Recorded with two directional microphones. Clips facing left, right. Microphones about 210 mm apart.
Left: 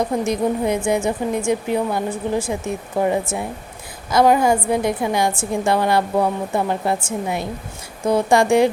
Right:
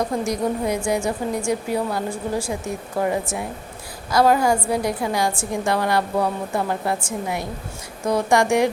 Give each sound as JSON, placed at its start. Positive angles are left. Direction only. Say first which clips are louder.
{"t": 0.3, "sound": "a woman's voice", "louder": "left 3 dB", "side_deg": 25}